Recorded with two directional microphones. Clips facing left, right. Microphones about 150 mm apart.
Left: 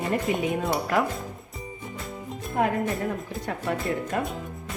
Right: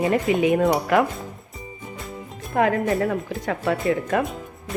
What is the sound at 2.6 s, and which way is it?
Speech, 90° right.